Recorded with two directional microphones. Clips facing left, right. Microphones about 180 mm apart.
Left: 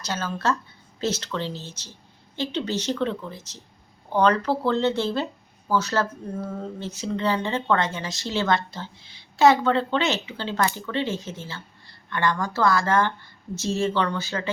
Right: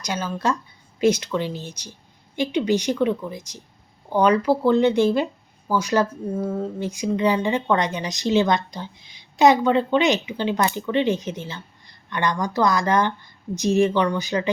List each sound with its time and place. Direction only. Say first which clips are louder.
0.0 s speech: right 2 dB; 15° right (ahead or behind)